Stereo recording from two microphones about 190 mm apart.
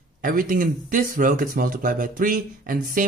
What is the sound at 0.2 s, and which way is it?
Speech, 45° right (ahead or behind).